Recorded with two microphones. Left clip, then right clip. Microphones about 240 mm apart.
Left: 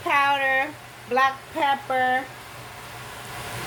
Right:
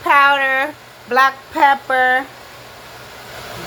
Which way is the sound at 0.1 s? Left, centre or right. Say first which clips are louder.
Right 8 dB; centre.